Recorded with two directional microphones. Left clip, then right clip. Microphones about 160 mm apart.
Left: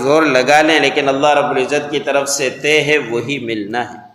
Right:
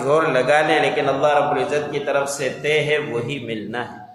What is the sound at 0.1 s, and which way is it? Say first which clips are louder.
A man's voice: left 5 dB; 30° left (ahead or behind).